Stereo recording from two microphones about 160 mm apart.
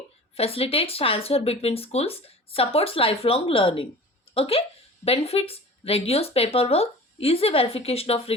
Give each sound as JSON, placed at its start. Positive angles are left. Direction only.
{"t": 0.3, "sound": "speech", "side_deg": 40}